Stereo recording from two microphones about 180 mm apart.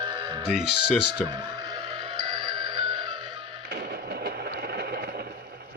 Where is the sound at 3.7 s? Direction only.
60° right (ahead or behind).